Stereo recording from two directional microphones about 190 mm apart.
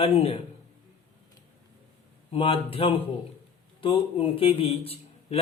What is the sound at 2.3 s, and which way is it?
A man's voice, 30° left (ahead or behind).